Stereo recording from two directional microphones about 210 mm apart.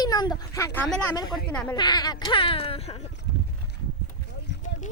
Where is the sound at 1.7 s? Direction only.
20° left (ahead or behind).